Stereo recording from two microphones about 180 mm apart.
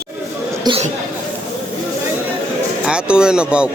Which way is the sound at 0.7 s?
25° right (ahead or behind).